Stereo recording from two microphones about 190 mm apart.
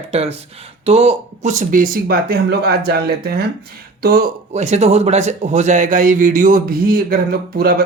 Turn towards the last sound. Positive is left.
turn(degrees=-50)  # may be behind; listen again after turning